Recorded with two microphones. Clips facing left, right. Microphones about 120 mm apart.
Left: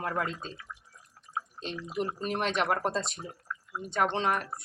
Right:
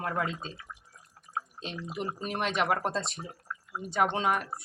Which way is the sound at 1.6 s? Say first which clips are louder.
Left 5 dB; 5° right (ahead or behind).